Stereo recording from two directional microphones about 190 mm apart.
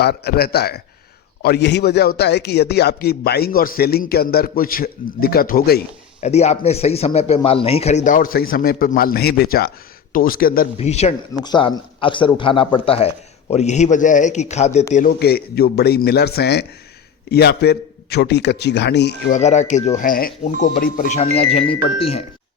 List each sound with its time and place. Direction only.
0.0 s a man's voice: 55° left (ahead or behind)
6.2 s a man's voice: 35° left (ahead or behind)
10.8 s a man's voice: 35° left (ahead or behind)
11.3 s a man's voice: 25° left (ahead or behind)
14.9 s a man's voice: 50° left (ahead or behind)
19.3 s a man's voice: 35° left (ahead or behind)
21.2 s a man's voice: 30° left (ahead or behind)